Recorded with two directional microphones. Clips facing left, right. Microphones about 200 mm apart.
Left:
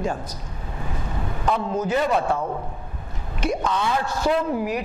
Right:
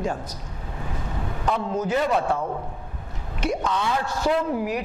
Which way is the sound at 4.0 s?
10° left (ahead or behind).